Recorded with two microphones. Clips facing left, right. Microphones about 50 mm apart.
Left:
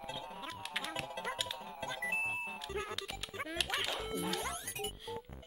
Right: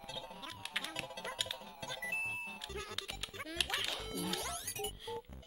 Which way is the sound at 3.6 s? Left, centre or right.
Centre.